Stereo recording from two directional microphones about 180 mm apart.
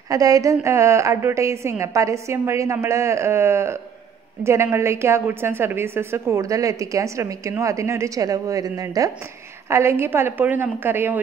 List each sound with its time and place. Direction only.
0.1 s a woman's voice: 20° right (ahead or behind)